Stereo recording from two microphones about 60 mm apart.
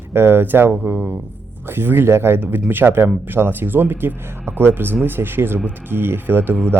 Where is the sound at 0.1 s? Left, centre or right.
Right.